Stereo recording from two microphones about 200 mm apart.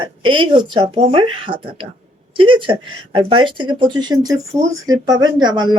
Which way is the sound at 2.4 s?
25° right (ahead or behind).